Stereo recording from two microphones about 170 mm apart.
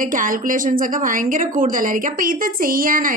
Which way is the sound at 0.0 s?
50° right (ahead or behind).